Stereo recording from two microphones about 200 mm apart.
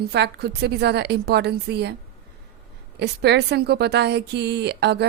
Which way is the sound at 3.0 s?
55° right (ahead or behind).